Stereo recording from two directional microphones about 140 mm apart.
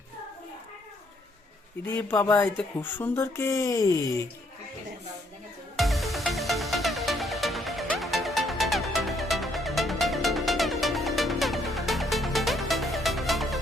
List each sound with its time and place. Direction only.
1.8 s speech: 15° left (ahead or behind)
5.7 s music: centre (ahead or behind)